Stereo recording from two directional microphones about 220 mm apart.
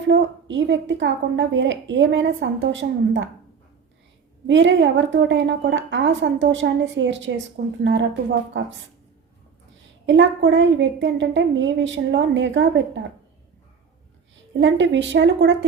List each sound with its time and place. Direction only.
0.1 s a woman's voice: 55° right (ahead or behind)
4.4 s a woman's voice: 55° right (ahead or behind)
10.1 s a woman's voice: 55° right (ahead or behind)
14.6 s a woman's voice: 55° right (ahead or behind)